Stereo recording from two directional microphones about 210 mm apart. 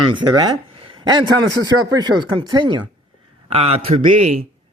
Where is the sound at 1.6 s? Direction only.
20° right (ahead or behind).